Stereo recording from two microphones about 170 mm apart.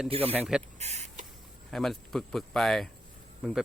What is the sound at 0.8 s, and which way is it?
Speech, 40° right (ahead or behind).